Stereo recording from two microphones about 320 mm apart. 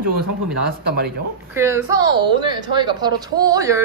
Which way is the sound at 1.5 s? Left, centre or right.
Centre.